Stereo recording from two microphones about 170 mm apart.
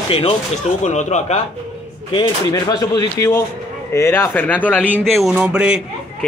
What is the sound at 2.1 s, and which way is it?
Speech, 25° left (ahead or behind).